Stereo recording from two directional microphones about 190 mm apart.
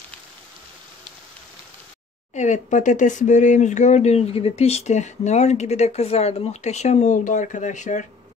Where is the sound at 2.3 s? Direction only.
40° left (ahead or behind).